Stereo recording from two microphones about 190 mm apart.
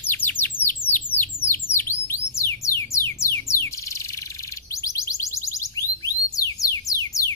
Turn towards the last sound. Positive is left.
turn(degrees=15)  # may be behind; listen again after turning